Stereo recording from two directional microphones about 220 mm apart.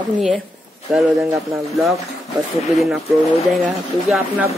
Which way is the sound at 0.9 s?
5° right (ahead or behind).